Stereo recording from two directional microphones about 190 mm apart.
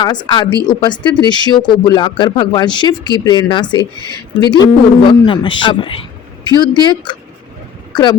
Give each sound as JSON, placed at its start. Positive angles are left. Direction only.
{"t": 0.0, "sound": "speech", "side_deg": 25}